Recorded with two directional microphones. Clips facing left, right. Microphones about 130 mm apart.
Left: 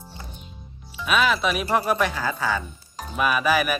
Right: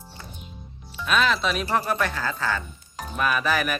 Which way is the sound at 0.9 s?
10° left (ahead or behind).